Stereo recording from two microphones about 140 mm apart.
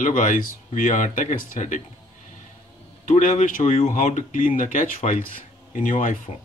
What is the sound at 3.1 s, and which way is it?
Speech, 70° left (ahead or behind).